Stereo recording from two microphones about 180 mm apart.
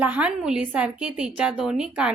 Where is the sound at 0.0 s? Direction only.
10° right (ahead or behind).